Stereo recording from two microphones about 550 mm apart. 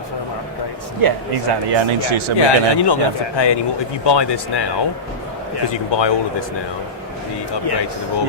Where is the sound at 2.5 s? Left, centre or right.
Left.